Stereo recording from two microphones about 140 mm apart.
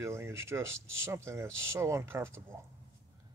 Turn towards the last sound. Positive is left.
turn(degrees=-20)  # may be behind; listen again after turning